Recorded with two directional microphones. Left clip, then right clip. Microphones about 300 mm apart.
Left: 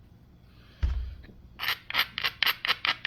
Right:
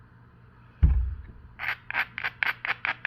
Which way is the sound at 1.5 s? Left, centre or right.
Left.